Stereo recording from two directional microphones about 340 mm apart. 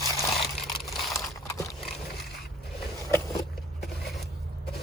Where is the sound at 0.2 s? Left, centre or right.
Centre.